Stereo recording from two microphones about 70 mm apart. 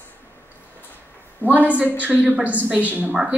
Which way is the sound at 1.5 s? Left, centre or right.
Right.